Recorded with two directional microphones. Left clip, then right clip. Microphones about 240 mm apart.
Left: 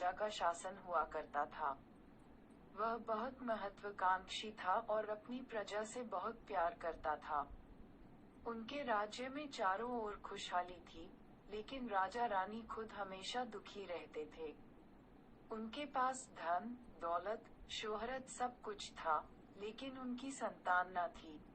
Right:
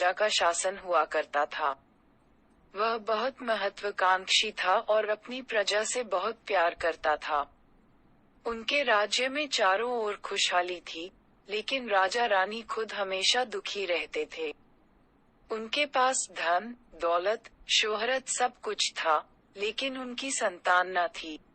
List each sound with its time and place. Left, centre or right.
0.0 s a woman's voice: right
8.4 s a woman's voice: right